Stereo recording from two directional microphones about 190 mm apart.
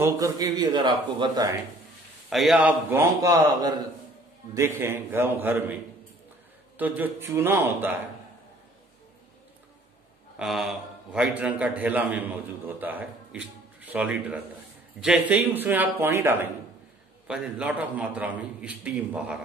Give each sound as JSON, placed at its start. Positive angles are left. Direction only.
{"t": 0.0, "sound": "speech", "side_deg": -20}
{"t": 2.2, "sound": "a man's voice", "side_deg": 0}
{"t": 6.8, "sound": "a man's voice", "side_deg": -10}
{"t": 10.4, "sound": "a man's voice", "side_deg": 0}